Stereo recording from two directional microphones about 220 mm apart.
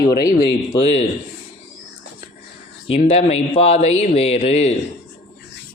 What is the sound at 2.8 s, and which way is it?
Speech, 30° left (ahead or behind).